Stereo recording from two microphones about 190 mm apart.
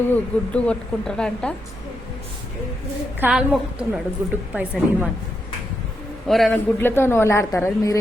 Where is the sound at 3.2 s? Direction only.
5° right (ahead or behind).